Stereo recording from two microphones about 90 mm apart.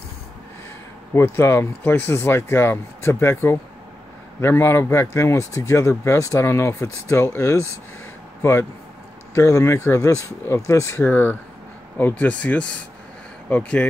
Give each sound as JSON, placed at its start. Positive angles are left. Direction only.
{"t": 1.1, "sound": "a man's voice", "side_deg": 30}